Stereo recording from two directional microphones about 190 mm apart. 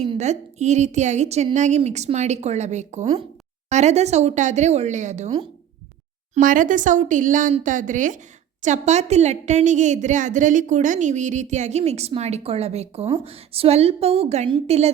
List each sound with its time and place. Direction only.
0.0 s a woman's voice: 35° right (ahead or behind)
6.3 s a woman's voice: 45° right (ahead or behind)